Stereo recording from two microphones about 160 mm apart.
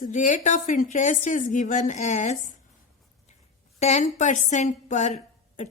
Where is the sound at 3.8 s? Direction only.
50° left (ahead or behind).